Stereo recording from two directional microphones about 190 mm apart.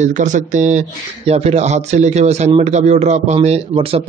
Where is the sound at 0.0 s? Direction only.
40° right (ahead or behind).